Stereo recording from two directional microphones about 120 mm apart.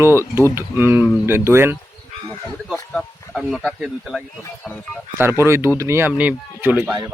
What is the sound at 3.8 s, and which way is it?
Speech, 5° right (ahead or behind).